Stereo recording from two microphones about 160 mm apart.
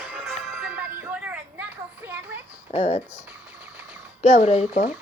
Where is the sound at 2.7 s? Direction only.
45° left (ahead or behind).